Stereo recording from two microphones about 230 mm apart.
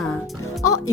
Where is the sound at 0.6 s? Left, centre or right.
Left.